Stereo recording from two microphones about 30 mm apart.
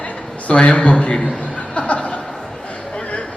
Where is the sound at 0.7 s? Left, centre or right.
Left.